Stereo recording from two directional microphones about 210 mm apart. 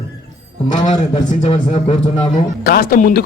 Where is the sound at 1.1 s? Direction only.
30° left (ahead or behind).